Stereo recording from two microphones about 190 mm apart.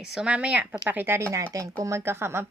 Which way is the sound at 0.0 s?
5° right (ahead or behind).